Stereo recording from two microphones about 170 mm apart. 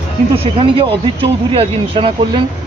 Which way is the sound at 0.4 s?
30° right (ahead or behind).